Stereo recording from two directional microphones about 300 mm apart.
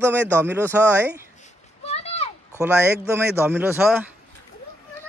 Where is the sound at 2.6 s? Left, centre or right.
Centre.